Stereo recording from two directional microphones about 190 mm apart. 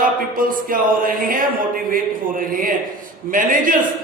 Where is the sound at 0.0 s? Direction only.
45° right (ahead or behind).